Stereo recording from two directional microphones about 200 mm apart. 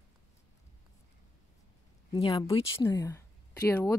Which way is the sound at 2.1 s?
25° left (ahead or behind).